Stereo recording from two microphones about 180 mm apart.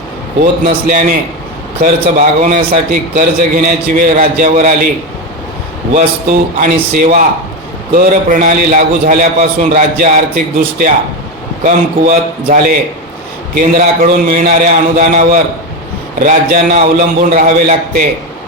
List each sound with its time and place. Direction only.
0.6 s a man's voice: 50° right (ahead or behind)
5.9 s a man's voice: 50° right (ahead or behind)